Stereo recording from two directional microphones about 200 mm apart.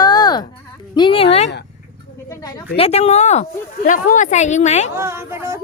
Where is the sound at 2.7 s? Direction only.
30° left (ahead or behind).